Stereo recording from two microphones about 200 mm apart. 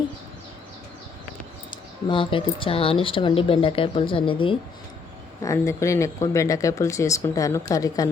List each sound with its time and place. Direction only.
2.0 s speech: 25° left (ahead or behind)
5.4 s speech: 15° left (ahead or behind)